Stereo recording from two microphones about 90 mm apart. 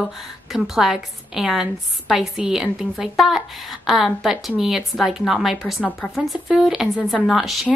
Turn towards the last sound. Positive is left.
turn(degrees=-5)  # may be behind; listen again after turning